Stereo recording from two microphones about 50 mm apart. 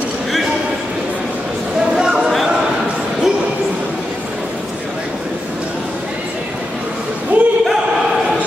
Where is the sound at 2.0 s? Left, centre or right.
Centre.